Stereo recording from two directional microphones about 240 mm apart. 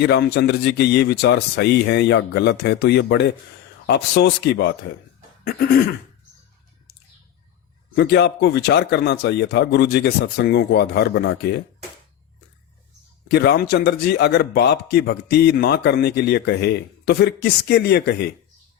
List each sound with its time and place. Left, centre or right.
0.0 s a man's voice: left
5.5 s throat clearing: left
7.9 s a man's voice: left
13.2 s a man's voice: left